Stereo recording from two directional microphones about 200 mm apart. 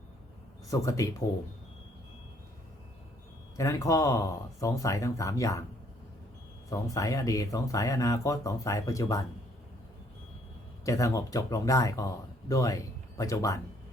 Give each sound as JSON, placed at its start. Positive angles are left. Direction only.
{"t": 0.7, "sound": "speech", "side_deg": 15}
{"t": 3.6, "sound": "speech", "side_deg": 15}
{"t": 6.7, "sound": "speech", "side_deg": 15}
{"t": 10.8, "sound": "speech", "side_deg": 15}